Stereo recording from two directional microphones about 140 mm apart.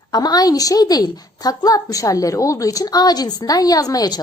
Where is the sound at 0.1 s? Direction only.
30° left (ahead or behind).